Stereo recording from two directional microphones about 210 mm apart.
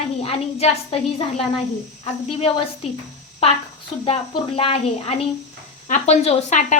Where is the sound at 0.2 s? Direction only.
30° left (ahead or behind).